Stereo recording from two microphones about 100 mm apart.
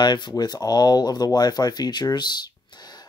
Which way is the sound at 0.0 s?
45° left (ahead or behind).